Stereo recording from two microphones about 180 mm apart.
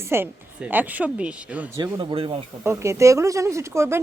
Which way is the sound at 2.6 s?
15° right (ahead or behind).